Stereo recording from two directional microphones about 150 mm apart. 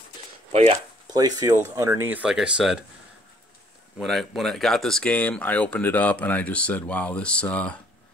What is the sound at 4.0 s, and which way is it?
Speech, centre (ahead or behind).